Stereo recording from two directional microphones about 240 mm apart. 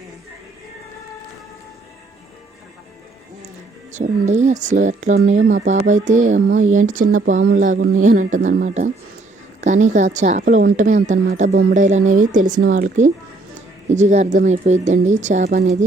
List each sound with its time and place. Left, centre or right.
3.9 s a woman's voice: right